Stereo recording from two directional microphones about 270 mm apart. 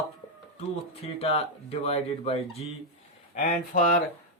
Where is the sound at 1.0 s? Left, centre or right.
Left.